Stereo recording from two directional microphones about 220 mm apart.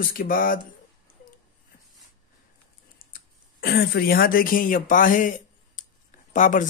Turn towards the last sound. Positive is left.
turn(degrees=35)  # may be behind; listen again after turning